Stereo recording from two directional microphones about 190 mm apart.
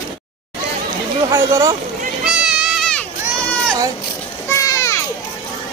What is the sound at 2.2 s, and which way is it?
Goat, 5° right (ahead or behind).